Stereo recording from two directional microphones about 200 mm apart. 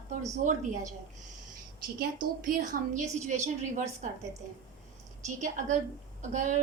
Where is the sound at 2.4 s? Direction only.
40° right (ahead or behind).